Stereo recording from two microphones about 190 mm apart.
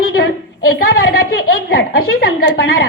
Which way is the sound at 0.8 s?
55° left (ahead or behind).